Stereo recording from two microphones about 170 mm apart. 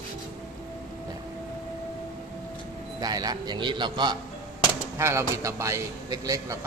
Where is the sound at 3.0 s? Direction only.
20° right (ahead or behind).